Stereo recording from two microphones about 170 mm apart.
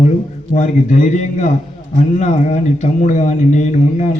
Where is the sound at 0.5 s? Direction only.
45° left (ahead or behind).